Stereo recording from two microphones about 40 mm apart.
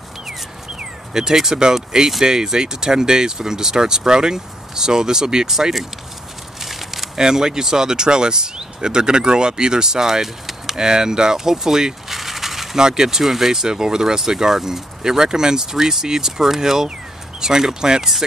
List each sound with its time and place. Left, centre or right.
0.3 s speech: centre
5.5 s speech: centre
6.6 s a sound: centre
7.2 s speech: centre
12.7 s speech: centre